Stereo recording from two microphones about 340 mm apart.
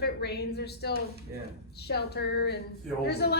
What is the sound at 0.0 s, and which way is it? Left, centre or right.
A woman's voice, left.